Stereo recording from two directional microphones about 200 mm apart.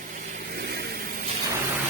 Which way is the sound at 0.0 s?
40° right (ahead or behind).